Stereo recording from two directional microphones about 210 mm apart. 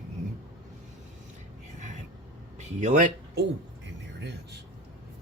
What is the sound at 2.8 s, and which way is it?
Speech, 35° right (ahead or behind).